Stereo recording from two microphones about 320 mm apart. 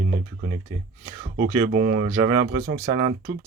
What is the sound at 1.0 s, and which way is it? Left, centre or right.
Speech, right.